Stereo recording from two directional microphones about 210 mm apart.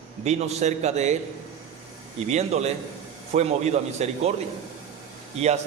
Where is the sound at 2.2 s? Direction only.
30° right (ahead or behind).